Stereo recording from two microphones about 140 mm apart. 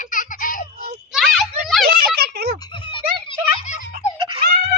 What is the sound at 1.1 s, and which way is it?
Children playing, centre (ahead or behind).